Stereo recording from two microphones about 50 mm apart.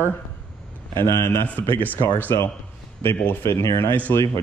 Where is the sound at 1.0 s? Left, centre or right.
Left.